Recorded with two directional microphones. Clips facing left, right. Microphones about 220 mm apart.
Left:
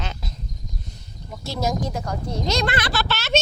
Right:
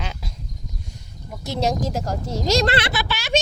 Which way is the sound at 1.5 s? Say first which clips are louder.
Right 3 dB; 20° right (ahead or behind).